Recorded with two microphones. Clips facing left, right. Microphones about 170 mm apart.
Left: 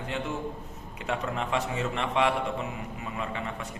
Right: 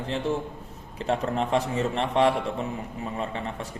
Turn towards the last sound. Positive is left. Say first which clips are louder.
# right 2 dB
turn(degrees=-35)  # may be behind; listen again after turning